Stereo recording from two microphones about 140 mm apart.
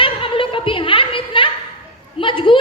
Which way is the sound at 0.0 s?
40° left (ahead or behind).